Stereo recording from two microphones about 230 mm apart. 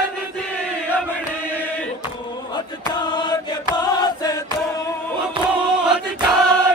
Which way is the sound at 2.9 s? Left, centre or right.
Centre.